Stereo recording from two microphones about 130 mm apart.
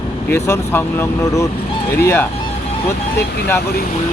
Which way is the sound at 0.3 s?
20° left (ahead or behind).